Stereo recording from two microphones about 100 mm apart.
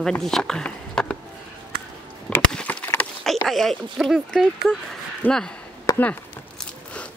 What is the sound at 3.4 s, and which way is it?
Speech, centre (ahead or behind).